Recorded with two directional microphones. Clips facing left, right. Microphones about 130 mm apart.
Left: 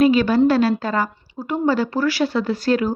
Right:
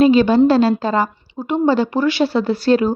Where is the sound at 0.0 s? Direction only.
25° right (ahead or behind).